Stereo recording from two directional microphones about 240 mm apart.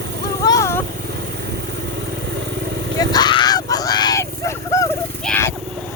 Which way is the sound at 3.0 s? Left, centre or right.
Centre.